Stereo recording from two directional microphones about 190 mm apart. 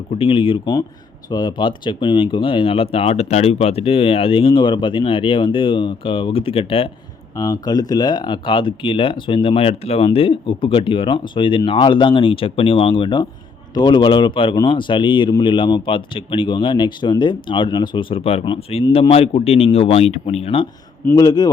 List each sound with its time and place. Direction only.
0.2 s speech: 25° left (ahead or behind)
21.1 s speech: 20° left (ahead or behind)